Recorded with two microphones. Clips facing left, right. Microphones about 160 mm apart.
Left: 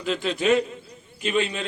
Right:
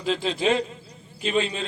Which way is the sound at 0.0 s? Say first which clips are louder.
Even; 30° right (ahead or behind).